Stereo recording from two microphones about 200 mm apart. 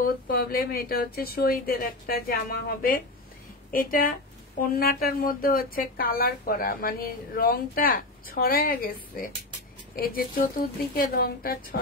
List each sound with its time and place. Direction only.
0.0 s speech: 50° left (ahead or behind)